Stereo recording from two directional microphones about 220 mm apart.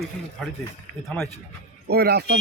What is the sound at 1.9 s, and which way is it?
Speech, 45° right (ahead or behind).